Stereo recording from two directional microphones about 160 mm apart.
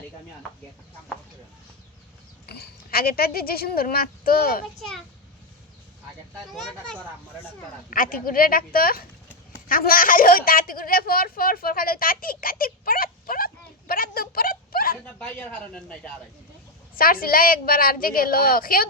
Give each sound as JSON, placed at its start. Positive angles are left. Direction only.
{"t": 2.5, "sound": "speech", "side_deg": 75}
{"t": 4.8, "sound": "a child's voice", "side_deg": 0}
{"t": 7.9, "sound": "a woman's voice", "side_deg": 60}
{"t": 15.0, "sound": "speech", "side_deg": 10}
{"t": 16.9, "sound": "a woman's voice", "side_deg": 65}